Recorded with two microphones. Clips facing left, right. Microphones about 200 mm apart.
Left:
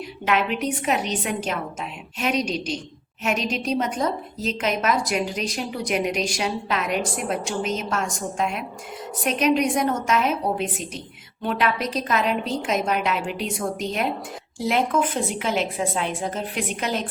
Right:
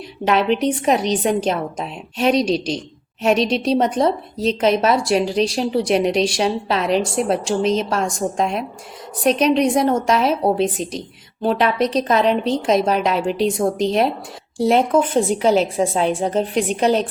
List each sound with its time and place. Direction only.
0.3 s a woman's voice: 35° right (ahead or behind)